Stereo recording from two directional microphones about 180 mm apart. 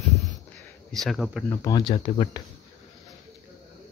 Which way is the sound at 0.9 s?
Centre (ahead or behind).